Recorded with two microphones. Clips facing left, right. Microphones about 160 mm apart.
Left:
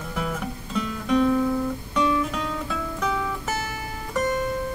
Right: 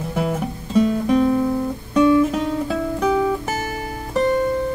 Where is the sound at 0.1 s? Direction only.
35° right (ahead or behind).